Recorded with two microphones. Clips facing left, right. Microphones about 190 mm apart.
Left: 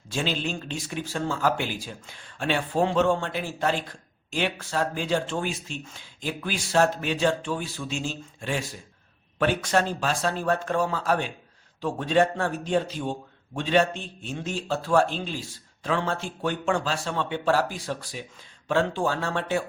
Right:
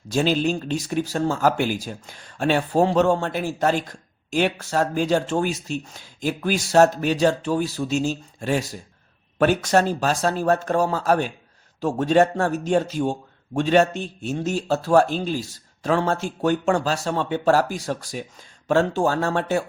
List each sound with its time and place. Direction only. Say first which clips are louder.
0.1 s a man's voice: right 8 dB; 40° right (ahead or behind)